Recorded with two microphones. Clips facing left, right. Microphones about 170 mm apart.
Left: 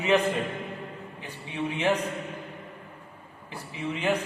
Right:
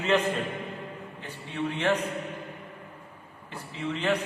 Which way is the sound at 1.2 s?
15° left (ahead or behind).